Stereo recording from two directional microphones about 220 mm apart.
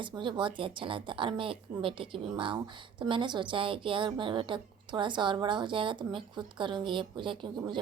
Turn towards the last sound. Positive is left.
turn(degrees=-20)  # may be behind; listen again after turning